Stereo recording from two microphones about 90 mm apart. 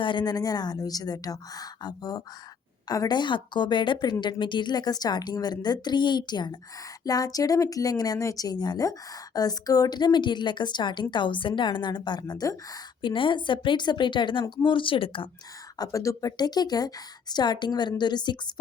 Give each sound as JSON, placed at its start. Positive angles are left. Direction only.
{"t": 0.0, "sound": "a woman's voice", "side_deg": 60}
{"t": 0.3, "sound": "a woman's voice", "side_deg": 45}
{"t": 7.0, "sound": "a woman's voice", "side_deg": 45}
{"t": 13.0, "sound": "a woman's voice", "side_deg": 65}
{"t": 15.8, "sound": "speech", "side_deg": 35}